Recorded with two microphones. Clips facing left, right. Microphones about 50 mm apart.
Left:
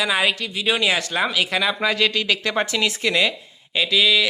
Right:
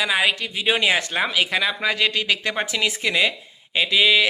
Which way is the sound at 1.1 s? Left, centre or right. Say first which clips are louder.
Even; centre.